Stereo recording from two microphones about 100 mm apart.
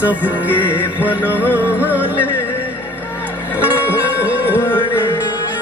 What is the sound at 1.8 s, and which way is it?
Speech, 15° right (ahead or behind).